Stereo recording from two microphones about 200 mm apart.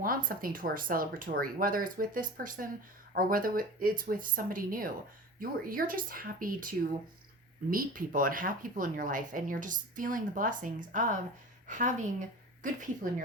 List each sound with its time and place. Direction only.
0.3 s a woman's voice: 45° right (ahead or behind)